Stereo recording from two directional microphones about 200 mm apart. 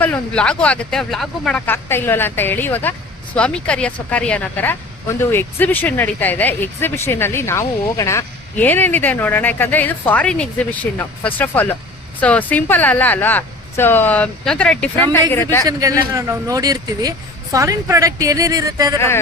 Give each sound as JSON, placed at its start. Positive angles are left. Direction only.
{"t": 0.0, "sound": "speech", "side_deg": 5}
{"t": 15.6, "sound": "speech", "side_deg": -15}
{"t": 18.9, "sound": "speech", "side_deg": 10}